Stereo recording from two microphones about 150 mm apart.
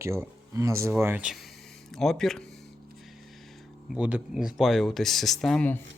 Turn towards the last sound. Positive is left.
turn(degrees=10)  # may be behind; listen again after turning